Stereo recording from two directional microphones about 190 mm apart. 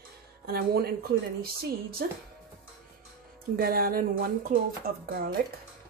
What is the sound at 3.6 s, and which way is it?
Speech, 55° right (ahead or behind).